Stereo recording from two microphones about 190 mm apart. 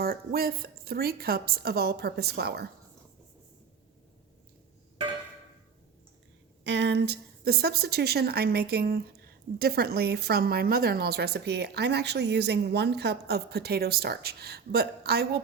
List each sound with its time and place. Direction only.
0.0 s a woman's voice: 50° right (ahead or behind)
6.7 s a woman's voice: 65° right (ahead or behind)